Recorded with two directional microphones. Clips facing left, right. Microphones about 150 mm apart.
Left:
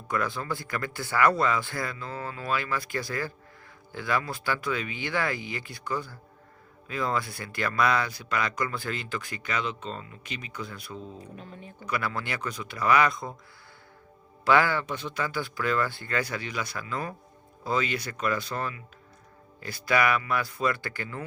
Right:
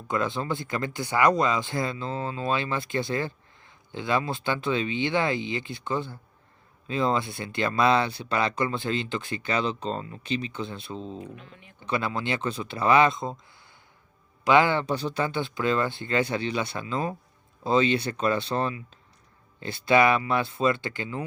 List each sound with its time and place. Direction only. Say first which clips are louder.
0.1 s speech: right 3 dB; 20° right (ahead or behind)
11.2 s speech: right 1 dB; 40° left (ahead or behind)
11.9 s speech: right 4 dB; 25° right (ahead or behind)
14.4 s speech: right 3 dB; 20° right (ahead or behind)